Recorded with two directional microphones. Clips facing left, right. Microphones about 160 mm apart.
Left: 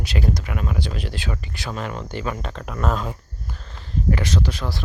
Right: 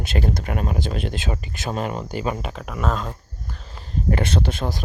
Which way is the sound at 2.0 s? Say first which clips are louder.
Right 2 dB; 10° right (ahead or behind).